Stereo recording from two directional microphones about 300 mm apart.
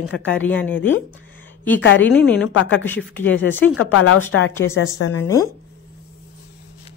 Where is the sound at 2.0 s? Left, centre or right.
Centre.